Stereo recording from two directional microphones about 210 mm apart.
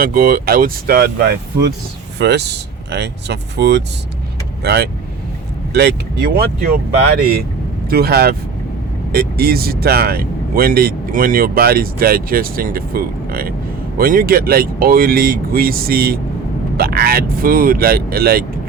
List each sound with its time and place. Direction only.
0.0 s speech: 45° right (ahead or behind)